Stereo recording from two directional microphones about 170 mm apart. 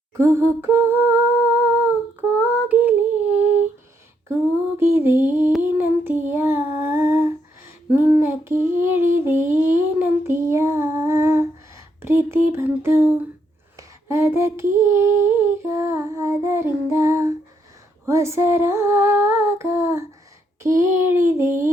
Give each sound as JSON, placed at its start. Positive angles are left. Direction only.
{"t": 0.2, "sound": "humming", "side_deg": -15}
{"t": 2.4, "sound": "a sound", "side_deg": -10}
{"t": 4.8, "sound": "mantra", "side_deg": -15}
{"t": 5.6, "sound": "child singing", "side_deg": -10}
{"t": 7.9, "sound": "female singing", "side_deg": -10}
{"t": 9.1, "sound": "child singing", "side_deg": -15}
{"t": 12.0, "sound": "humming", "side_deg": -15}